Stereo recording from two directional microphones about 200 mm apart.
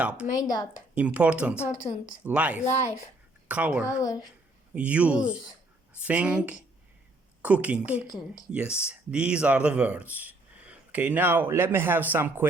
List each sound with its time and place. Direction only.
0.0 s speech: 5° right (ahead or behind)
0.3 s speech: 20° left (ahead or behind)
0.9 s speech: 5° right (ahead or behind)
1.8 s speech: 25° left (ahead or behind)
2.2 s speech: 5° right (ahead or behind)
4.0 s speech: 20° left (ahead or behind)
4.7 s speech: 5° right (ahead or behind)